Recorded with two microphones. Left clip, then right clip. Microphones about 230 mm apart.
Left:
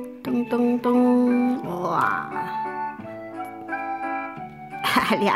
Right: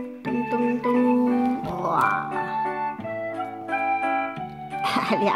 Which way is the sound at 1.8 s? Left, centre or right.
Left.